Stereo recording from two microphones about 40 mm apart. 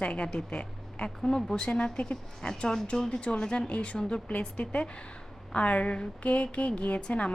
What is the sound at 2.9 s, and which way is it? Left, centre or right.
A woman's voice, centre.